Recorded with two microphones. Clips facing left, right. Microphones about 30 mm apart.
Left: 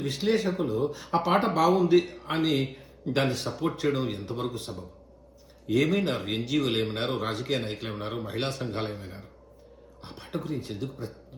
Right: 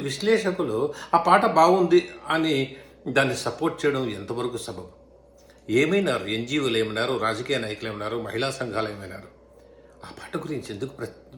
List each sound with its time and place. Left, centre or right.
0.0 s speech: right
0.7 s speech: right
3.1 s speech: right
3.7 s speech: right
4.5 s a man's voice: right
8.7 s a man's voice: right
9.0 s speech: right
10.0 s speech: right